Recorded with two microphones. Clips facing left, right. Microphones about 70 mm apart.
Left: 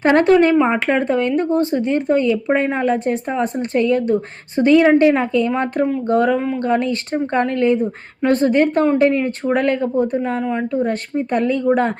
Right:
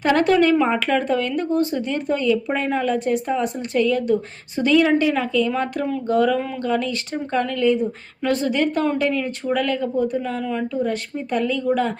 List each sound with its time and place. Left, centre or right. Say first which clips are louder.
0.0 s speech: left 4 dB; left